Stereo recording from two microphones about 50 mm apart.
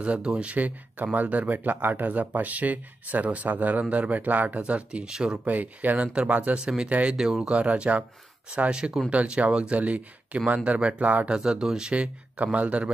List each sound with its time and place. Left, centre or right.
0.0 s speech: right
5.1 s speech: centre
5.4 s speech: right
7.2 s speech: centre
7.4 s speech: right
11.3 s speech: centre
11.9 s speech: right